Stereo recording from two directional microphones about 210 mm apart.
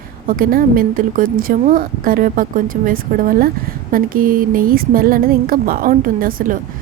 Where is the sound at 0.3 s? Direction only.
40° right (ahead or behind).